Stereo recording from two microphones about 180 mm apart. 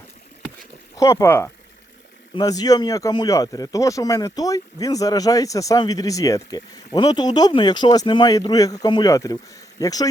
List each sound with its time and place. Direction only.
0.9 s speech: 15° left (ahead or behind)